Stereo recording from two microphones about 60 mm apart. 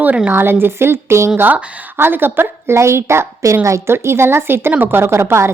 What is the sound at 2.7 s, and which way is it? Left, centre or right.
A woman's voice, right.